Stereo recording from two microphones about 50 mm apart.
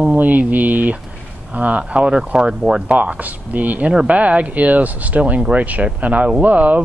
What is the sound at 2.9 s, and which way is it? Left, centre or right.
Speech, right.